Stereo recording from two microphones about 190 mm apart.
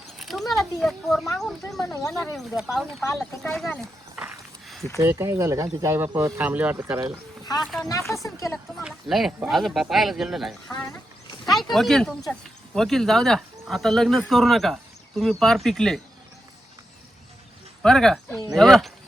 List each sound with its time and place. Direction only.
0.2 s a sound: centre (ahead or behind)
1.4 s speech: centre (ahead or behind)
3.4 s a sound: centre (ahead or behind)
4.9 s speech: 15° right (ahead or behind)
7.6 s speech: centre (ahead or behind)
8.1 s a woman's voice: 15° left (ahead or behind)
8.7 s speech: centre (ahead or behind)
11.5 s speech: centre (ahead or behind)
17.8 s speech: centre (ahead or behind)